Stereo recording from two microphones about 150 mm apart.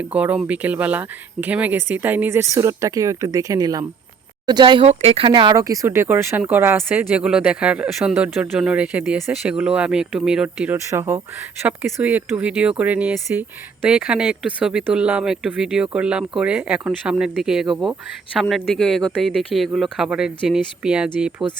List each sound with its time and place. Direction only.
0.1 s speech: 10° right (ahead or behind); by 4.9 s 30° right (ahead or behind)
4.9 s speech: 40° right (ahead or behind); by 21.4 s 5° right (ahead or behind)